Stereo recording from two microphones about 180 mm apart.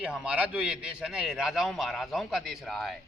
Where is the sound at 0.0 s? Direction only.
5° right (ahead or behind).